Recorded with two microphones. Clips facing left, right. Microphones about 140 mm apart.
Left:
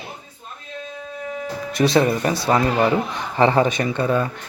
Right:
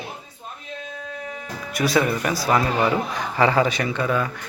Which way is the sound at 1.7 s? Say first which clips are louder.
Left 3 dB; 25° left (ahead or behind).